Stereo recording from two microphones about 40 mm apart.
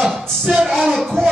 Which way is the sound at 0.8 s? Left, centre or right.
Centre.